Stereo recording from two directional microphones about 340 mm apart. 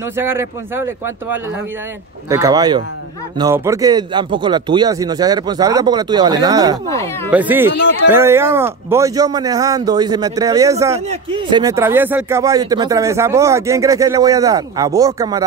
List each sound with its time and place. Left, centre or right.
0.2 s speech: centre
2.2 s speech: centre
7.7 s speech: left
8.1 s speech: centre